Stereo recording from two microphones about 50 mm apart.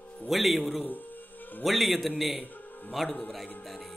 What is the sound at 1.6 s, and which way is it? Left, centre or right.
Speech, centre.